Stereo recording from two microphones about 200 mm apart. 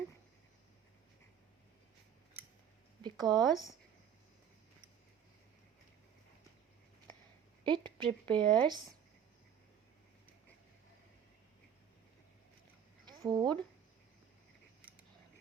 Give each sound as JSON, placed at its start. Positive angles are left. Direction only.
{"t": 3.0, "sound": "a sound", "side_deg": -20}
{"t": 7.6, "sound": "a woman's voice", "side_deg": -25}
{"t": 13.1, "sound": "speech", "side_deg": -20}